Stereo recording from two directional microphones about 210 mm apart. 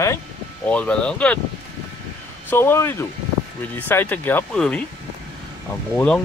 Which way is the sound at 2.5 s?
10° left (ahead or behind).